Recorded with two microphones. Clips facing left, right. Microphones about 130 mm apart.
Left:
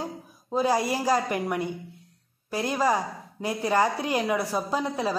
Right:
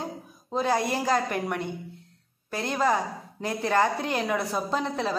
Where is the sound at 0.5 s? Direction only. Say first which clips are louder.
Left 1 dB; 5° left (ahead or behind).